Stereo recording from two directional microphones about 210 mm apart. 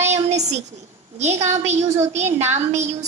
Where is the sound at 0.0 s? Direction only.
30° right (ahead or behind).